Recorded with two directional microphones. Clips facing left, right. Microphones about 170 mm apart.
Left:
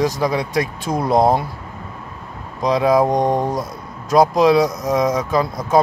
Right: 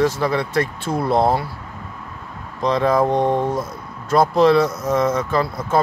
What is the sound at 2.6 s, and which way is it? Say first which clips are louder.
Speech: left 2 dB; 10° left (ahead or behind).